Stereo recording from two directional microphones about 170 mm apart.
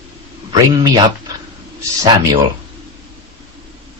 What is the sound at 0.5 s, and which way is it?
Speech, 25° right (ahead or behind).